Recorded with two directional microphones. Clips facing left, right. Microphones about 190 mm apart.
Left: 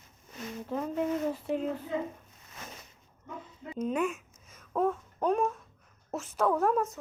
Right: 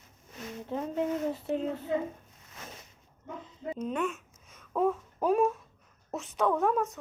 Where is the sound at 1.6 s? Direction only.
Centre (ahead or behind).